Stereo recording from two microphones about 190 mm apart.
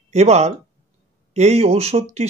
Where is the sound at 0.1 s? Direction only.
35° right (ahead or behind).